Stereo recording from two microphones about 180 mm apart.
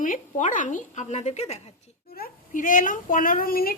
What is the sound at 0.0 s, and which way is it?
Speech, 45° left (ahead or behind).